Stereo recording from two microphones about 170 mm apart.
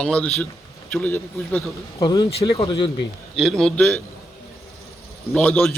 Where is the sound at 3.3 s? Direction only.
Centre (ahead or behind).